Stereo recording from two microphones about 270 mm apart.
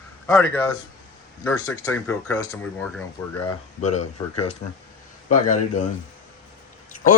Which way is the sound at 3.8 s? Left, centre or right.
Left.